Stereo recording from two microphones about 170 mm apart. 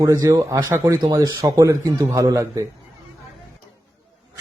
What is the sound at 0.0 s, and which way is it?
A man's voice, 20° right (ahead or behind).